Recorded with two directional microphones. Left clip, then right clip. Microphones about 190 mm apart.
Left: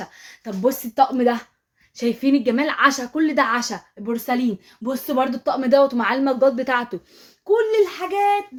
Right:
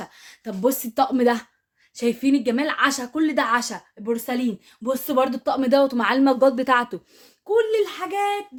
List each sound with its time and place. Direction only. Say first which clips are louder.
0.0 s a sound: left 1 dB; 20° right (ahead or behind)
0.9 s speech: left 3 dB; 35° right (ahead or behind)
2.0 s a woman's voice: left 1 dB; 10° right (ahead or behind)
7.5 s speech: left 2 dB; 5° right (ahead or behind)